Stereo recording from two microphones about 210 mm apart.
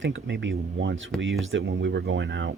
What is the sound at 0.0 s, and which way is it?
Speech, 60° right (ahead or behind).